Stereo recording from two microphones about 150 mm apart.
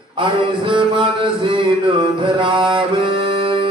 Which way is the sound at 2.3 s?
30° right (ahead or behind).